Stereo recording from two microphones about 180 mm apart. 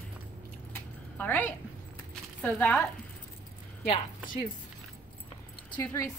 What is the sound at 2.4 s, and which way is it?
Speech, 10° left (ahead or behind).